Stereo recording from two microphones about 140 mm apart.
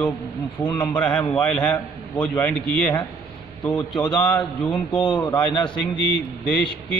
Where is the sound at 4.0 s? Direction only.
30° left (ahead or behind).